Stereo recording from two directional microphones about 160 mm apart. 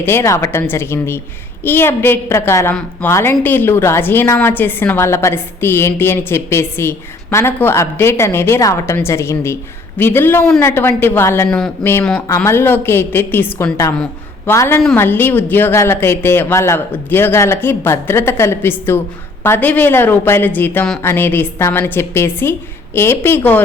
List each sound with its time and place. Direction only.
0.0 s a woman's voice: 15° left (ahead or behind)
11.4 s speech: 5° left (ahead or behind)
11.8 s a woman's voice: 15° left (ahead or behind)
13.9 s a sound: 5° left (ahead or behind)
14.5 s a woman's voice: 15° left (ahead or behind)